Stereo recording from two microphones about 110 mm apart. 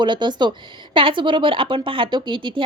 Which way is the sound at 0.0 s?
45° right (ahead or behind).